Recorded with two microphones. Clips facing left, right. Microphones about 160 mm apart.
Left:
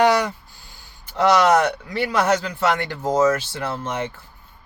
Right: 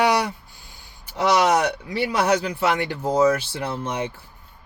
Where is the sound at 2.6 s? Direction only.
45° left (ahead or behind).